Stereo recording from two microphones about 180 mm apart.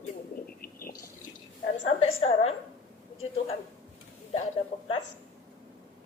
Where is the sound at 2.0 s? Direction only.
35° left (ahead or behind).